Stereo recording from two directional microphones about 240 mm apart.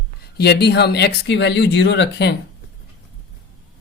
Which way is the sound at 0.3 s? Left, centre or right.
Left.